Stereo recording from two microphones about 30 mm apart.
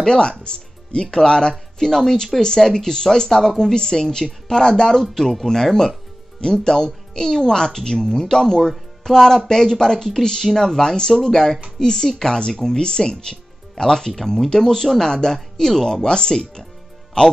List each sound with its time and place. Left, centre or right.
0.0 s music: left
1.1 s speech: left